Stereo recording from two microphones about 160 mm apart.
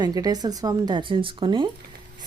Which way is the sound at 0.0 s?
25° right (ahead or behind).